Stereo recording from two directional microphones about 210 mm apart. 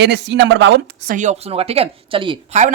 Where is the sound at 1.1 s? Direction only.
35° right (ahead or behind).